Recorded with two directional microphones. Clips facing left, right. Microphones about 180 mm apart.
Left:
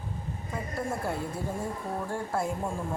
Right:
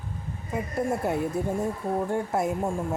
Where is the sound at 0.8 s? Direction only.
20° right (ahead or behind).